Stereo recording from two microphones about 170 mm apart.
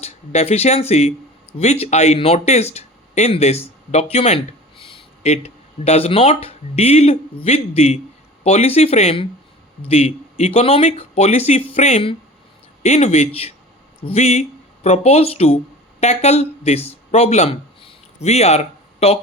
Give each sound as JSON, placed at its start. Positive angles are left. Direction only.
{"t": 0.0, "sound": "speech", "side_deg": 40}